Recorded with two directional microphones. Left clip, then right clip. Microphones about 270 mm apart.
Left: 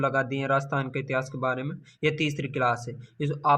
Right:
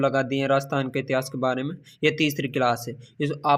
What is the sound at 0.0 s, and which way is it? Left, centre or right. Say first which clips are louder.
Speech: right 3 dB; right.